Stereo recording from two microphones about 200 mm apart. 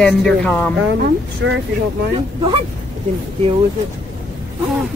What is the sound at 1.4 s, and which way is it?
Speech, 60° right (ahead or behind).